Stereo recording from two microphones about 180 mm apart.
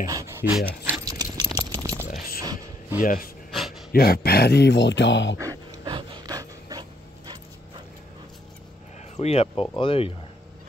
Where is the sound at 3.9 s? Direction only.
55° left (ahead or behind); by 5.3 s 80° left.